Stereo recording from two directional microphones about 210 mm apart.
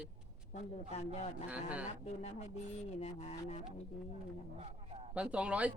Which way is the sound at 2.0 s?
30° left (ahead or behind).